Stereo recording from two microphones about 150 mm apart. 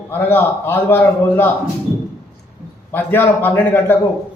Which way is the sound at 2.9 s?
15° left (ahead or behind).